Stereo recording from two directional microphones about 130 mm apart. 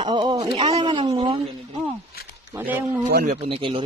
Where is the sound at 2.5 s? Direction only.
15° right (ahead or behind).